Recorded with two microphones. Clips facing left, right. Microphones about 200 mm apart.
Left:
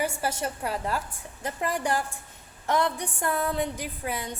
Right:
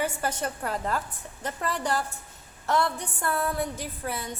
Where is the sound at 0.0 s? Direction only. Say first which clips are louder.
Even; 10° left (ahead or behind).